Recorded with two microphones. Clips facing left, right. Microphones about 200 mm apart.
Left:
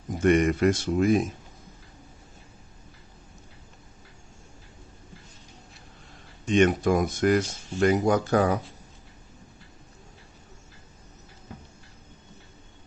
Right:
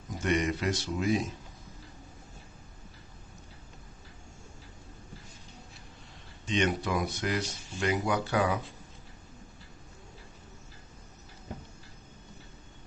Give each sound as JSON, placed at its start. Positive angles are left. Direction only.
{"t": 0.1, "sound": "speech", "side_deg": 55}
{"t": 6.5, "sound": "speech", "side_deg": 50}